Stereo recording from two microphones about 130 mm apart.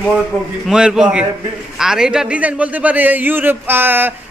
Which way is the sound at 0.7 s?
5° right (ahead or behind).